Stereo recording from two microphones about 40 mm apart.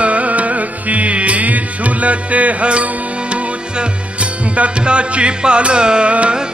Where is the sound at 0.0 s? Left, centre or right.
Right.